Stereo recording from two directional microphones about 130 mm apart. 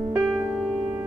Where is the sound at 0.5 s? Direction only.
5° right (ahead or behind).